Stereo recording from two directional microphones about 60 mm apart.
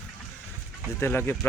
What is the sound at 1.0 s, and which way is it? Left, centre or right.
Speech, left.